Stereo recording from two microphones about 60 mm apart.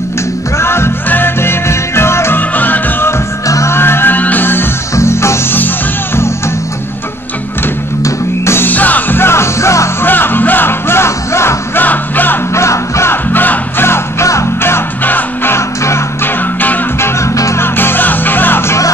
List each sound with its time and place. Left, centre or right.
0.6 s music: left
2.5 s music: left
3.4 s music: left
3.7 s music: left
4.9 s music: left
8.0 s music: left
8.6 s music: left
9.2 s music: left
10.0 s music: left
11.8 s music: left
12.5 s music: left
13.1 s music: left
15.5 s music: left
17.6 s music: left